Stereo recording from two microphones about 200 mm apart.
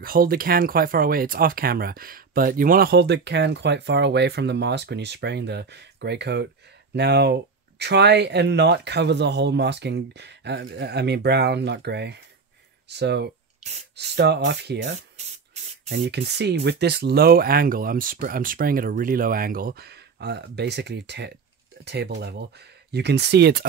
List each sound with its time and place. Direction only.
0.0 s speech: 45° right (ahead or behind)
15.1 s spray: 35° right (ahead or behind)
15.9 s speech: 55° right (ahead or behind)